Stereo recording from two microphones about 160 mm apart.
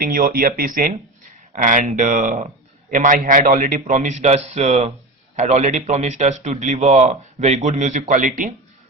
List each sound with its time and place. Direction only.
0.0 s a man's voice: 65° right (ahead or behind)